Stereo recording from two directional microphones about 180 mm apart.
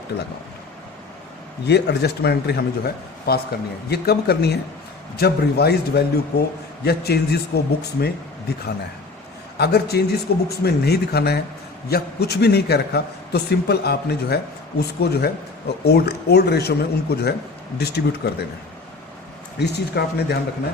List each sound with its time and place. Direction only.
1.6 s a man's voice: 65° left (ahead or behind)
19.5 s speech: 70° left (ahead or behind)